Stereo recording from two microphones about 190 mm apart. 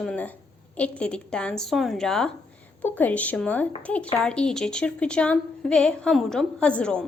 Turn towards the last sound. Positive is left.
turn(degrees=5)  # may be behind; listen again after turning